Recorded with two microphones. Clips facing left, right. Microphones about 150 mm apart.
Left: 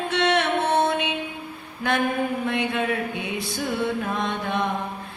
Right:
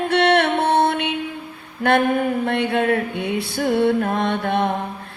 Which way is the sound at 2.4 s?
60° right (ahead or behind).